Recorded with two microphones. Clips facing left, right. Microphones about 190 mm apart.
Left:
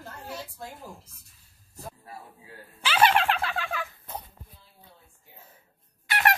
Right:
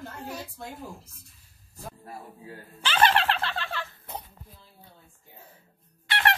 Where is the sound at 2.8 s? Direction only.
5° left (ahead or behind).